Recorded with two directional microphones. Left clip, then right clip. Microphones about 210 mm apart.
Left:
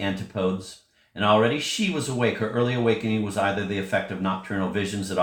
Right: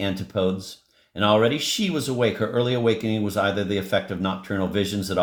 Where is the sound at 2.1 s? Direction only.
55° right (ahead or behind).